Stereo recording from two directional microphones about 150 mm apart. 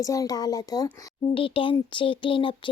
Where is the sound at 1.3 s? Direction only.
35° left (ahead or behind).